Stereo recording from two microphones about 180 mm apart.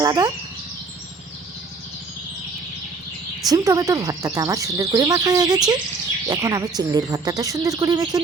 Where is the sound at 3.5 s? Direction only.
20° right (ahead or behind).